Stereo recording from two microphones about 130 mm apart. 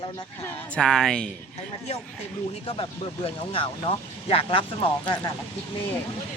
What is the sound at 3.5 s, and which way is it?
Speech, 45° left (ahead or behind).